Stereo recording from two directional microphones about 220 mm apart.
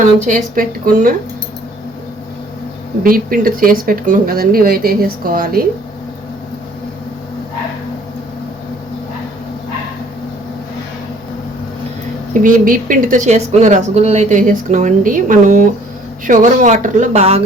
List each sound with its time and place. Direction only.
0.0 s speech: 35° right (ahead or behind)
3.0 s speech: 40° right (ahead or behind)
12.3 s speech: 40° right (ahead or behind)